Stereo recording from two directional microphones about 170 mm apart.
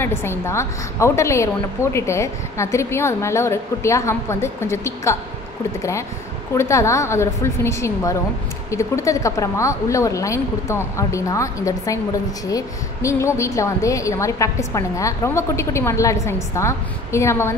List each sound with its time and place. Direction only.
0.0 s a woman's voice: 15° left (ahead or behind)